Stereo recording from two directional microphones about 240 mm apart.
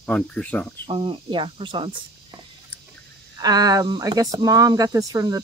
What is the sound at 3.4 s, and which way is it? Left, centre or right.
Speech, centre.